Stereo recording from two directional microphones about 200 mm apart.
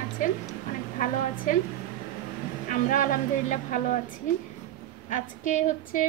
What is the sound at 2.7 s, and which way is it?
A woman's voice, 40° left (ahead or behind).